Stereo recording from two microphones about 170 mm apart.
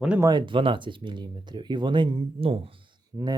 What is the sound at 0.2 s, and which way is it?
Speech, 25° right (ahead or behind).